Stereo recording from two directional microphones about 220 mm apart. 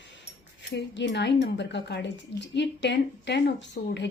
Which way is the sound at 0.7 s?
55° left (ahead or behind).